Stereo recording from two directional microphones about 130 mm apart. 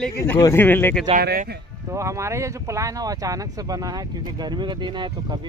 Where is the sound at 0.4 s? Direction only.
20° left (ahead or behind).